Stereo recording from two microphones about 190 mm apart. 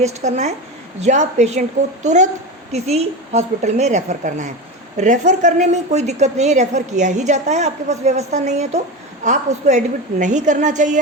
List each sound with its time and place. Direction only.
0.0 s a woman's voice: 35° right (ahead or behind)